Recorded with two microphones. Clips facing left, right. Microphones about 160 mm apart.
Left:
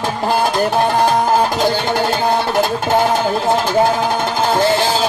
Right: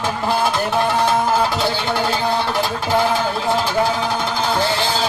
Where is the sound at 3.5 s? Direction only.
50° left (ahead or behind).